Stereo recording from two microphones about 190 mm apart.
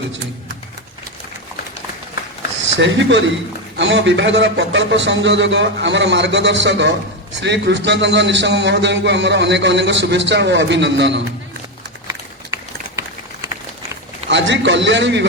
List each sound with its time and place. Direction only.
2.7 s a man's voice: 75° right (ahead or behind)
14.3 s a man's voice: 70° right (ahead or behind)